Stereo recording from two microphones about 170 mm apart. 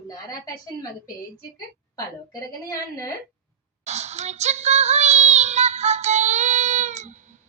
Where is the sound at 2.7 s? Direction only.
20° left (ahead or behind).